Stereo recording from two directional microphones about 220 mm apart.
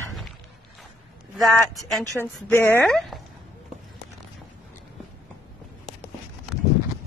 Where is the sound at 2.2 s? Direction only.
10° left (ahead or behind).